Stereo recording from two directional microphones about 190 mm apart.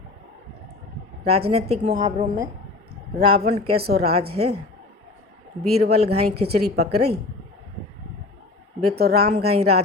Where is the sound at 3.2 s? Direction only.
30° right (ahead or behind).